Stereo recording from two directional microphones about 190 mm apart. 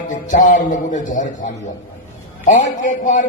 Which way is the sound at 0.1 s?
45° left (ahead or behind).